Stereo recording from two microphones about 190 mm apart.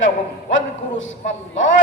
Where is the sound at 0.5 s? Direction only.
90° left.